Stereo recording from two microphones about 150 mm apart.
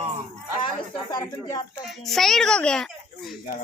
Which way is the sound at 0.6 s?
30° left (ahead or behind).